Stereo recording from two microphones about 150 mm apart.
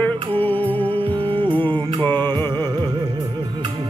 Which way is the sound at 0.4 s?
10° left (ahead or behind).